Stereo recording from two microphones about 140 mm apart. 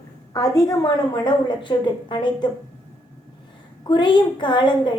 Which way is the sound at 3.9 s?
35° left (ahead or behind).